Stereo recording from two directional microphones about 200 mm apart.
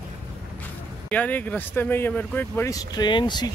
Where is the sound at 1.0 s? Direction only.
10° left (ahead or behind).